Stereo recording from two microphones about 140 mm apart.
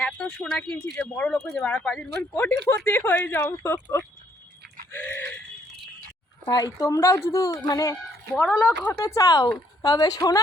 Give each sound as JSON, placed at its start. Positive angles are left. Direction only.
{"t": 0.0, "sound": "speech", "side_deg": 5}
{"t": 4.9, "sound": "a sound", "side_deg": 15}
{"t": 6.5, "sound": "a woman's voice", "side_deg": 25}
{"t": 8.4, "sound": "a woman's voice", "side_deg": 5}